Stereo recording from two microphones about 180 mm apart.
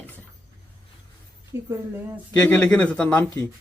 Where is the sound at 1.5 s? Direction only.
15° right (ahead or behind).